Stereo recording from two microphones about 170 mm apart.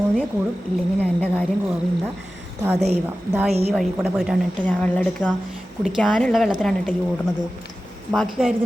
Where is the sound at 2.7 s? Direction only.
40° right (ahead or behind).